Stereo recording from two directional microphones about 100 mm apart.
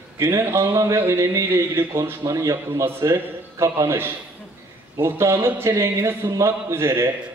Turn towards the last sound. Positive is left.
turn(degrees=-30)  # may be behind; listen again after turning